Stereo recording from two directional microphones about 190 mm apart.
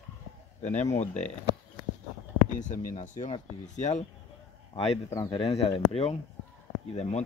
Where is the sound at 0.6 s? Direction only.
35° left (ahead or behind).